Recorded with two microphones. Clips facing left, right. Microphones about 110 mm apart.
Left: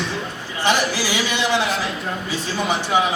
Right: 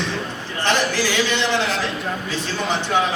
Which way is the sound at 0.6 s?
10° left (ahead or behind).